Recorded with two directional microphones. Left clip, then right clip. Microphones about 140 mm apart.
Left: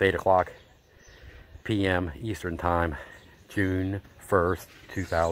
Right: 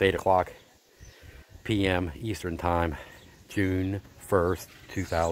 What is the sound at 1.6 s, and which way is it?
Speech, 10° right (ahead or behind).